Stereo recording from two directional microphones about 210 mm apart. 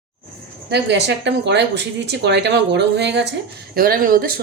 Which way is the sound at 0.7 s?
55° right (ahead or behind).